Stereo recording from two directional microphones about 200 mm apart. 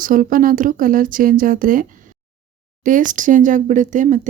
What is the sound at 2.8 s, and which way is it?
Speech, 40° right (ahead or behind).